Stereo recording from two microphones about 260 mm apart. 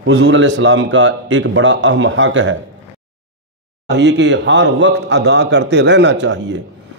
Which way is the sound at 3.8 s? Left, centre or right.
Right.